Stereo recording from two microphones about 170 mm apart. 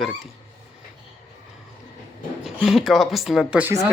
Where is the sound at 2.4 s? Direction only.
5° right (ahead or behind).